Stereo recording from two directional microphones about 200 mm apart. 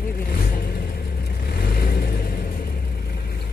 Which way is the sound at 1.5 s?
50° left (ahead or behind).